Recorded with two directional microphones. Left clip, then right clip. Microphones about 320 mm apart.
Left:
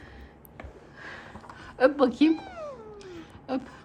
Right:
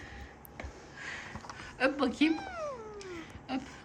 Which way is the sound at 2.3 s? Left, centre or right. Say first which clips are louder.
Even; centre.